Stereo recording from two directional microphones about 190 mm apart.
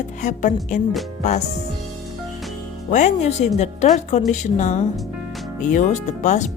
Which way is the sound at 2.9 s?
40° left (ahead or behind).